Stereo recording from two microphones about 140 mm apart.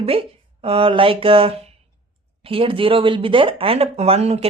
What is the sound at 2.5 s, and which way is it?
Speech, 40° right (ahead or behind).